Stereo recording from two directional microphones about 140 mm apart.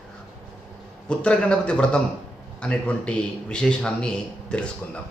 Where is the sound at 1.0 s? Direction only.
5° left (ahead or behind).